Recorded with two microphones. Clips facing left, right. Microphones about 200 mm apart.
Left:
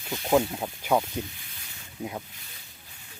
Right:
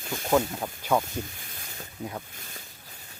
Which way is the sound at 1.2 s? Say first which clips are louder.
Even; 45° right (ahead or behind).